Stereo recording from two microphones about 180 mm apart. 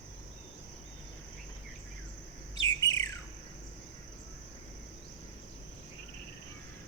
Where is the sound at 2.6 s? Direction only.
20° left (ahead or behind).